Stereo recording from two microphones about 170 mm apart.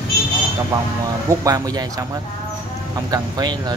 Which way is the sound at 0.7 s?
15° right (ahead or behind).